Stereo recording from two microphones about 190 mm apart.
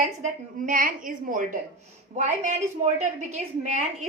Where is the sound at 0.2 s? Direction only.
45° right (ahead or behind).